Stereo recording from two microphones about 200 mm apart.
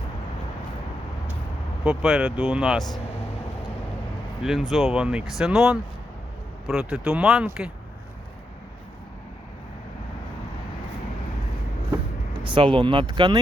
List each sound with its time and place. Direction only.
1.8 s speech: 5° right (ahead or behind)
4.4 s speech: centre (ahead or behind)
12.4 s speech: 25° right (ahead or behind)